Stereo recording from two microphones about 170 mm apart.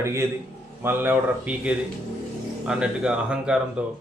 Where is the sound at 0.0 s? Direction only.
15° right (ahead or behind).